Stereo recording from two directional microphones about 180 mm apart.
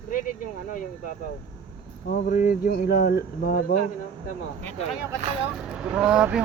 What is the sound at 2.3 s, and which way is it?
Speech, 50° left (ahead or behind).